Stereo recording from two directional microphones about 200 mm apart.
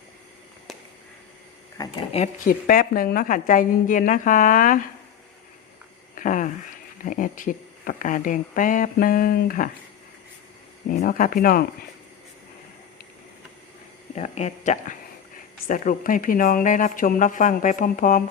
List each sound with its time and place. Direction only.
1.8 s speech: 20° left (ahead or behind)
2.1 s speech: 40° left (ahead or behind)
6.1 s a sound: 40° left (ahead or behind)
7.0 s speech: 45° left (ahead or behind)
10.8 s speech: 45° left (ahead or behind)
14.2 s speech: 35° left (ahead or behind)